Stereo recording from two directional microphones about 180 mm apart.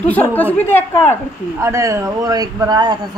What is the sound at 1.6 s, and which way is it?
A man's voice, 15° right (ahead or behind).